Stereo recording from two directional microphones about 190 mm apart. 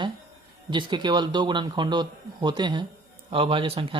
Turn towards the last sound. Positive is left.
turn(degrees=-30)  # may be behind; listen again after turning